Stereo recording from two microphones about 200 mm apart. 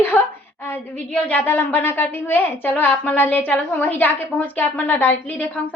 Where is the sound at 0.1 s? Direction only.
5° left (ahead or behind).